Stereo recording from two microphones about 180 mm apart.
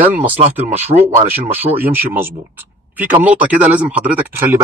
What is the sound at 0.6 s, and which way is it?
Speech, 10° right (ahead or behind).